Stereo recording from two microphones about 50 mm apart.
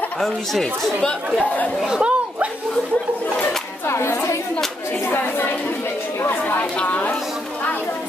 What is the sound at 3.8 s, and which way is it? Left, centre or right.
Speech, left.